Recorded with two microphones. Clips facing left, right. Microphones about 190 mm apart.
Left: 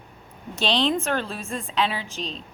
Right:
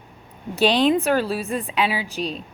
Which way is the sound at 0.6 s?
10° right (ahead or behind).